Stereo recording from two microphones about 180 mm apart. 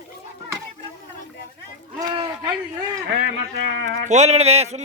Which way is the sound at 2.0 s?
25° right (ahead or behind).